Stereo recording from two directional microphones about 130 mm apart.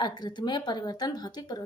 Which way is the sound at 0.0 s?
35° left (ahead or behind).